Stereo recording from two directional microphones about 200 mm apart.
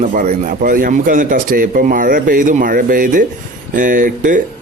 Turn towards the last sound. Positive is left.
turn(degrees=-40)  # may be behind; listen again after turning